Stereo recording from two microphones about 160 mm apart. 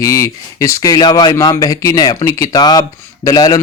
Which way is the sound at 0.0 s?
20° left (ahead or behind).